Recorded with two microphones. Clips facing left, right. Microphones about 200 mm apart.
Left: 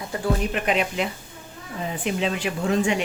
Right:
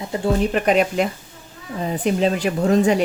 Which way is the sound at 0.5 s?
40° right (ahead or behind).